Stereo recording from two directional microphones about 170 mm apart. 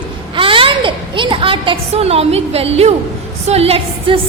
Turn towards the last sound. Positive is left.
turn(degrees=-35)  # may be behind; listen again after turning